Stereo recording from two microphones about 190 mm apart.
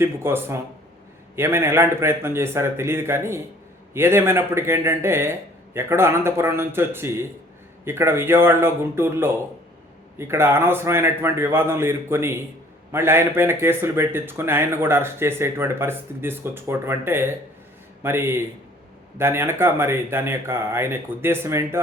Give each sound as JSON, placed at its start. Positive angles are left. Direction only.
{"t": 0.0, "sound": "speech", "side_deg": -10}